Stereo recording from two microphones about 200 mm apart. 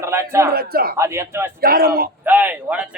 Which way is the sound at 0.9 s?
15° right (ahead or behind).